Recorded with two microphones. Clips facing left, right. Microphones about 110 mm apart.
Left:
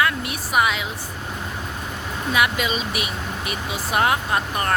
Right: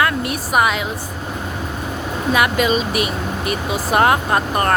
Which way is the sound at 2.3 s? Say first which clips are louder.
Right 5 dB; 50° right (ahead or behind).